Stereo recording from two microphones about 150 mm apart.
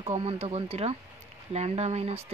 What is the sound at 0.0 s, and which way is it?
Speech, 40° right (ahead or behind).